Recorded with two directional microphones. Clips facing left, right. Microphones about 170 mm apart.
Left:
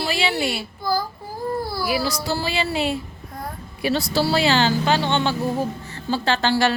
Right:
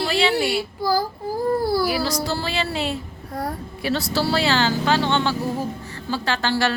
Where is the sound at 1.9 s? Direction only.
10° left (ahead or behind); by 6.5 s 25° left (ahead or behind).